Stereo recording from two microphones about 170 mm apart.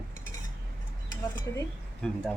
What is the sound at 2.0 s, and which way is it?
Speech, 5° left (ahead or behind).